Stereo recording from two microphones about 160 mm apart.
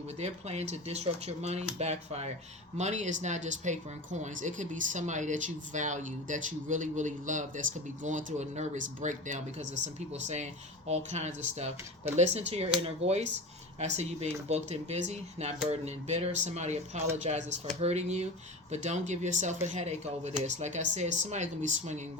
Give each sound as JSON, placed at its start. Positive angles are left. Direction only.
{"t": 0.2, "sound": "speech", "side_deg": -45}